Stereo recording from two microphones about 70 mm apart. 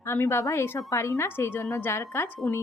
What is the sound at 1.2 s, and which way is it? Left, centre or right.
A woman's voice, left.